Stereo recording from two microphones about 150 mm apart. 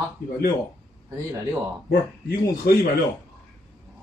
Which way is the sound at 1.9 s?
85° left.